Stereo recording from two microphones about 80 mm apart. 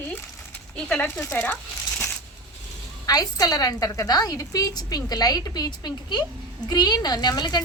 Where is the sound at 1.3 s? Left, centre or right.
Left.